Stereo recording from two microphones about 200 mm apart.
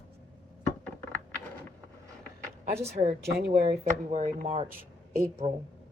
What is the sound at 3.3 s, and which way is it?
Speech, 55° right (ahead or behind).